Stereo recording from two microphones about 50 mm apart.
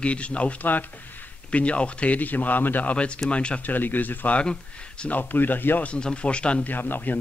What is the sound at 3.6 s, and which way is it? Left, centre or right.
A man's voice, left.